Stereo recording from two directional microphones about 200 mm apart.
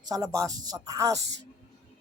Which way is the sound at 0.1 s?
15° right (ahead or behind).